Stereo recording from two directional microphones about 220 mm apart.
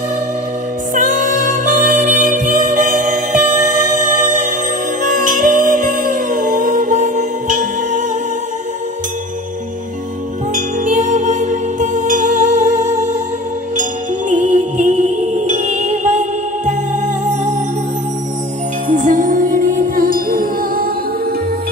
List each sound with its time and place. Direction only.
0.9 s music: 35° right (ahead or behind)
10.5 s music: 35° right (ahead or behind)
14.3 s music: 35° right (ahead or behind)
18.9 s music: 35° right (ahead or behind)